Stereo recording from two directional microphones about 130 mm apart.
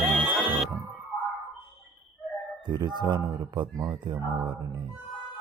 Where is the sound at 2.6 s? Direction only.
35° right (ahead or behind).